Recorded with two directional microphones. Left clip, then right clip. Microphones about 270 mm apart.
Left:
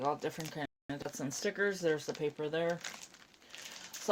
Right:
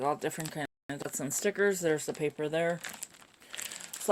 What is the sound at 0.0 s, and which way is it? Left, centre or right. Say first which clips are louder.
Speech: right 4 dB; right.